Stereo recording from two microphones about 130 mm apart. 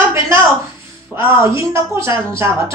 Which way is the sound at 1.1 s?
20° right (ahead or behind).